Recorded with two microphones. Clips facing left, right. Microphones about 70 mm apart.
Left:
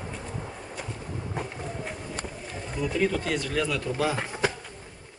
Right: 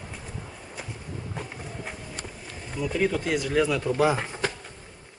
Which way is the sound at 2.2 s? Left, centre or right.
Centre.